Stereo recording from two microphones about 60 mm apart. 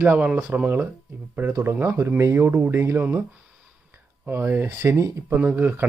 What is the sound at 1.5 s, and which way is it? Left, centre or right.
Speech, right.